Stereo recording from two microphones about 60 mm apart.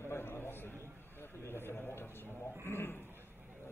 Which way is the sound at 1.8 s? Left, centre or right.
Left.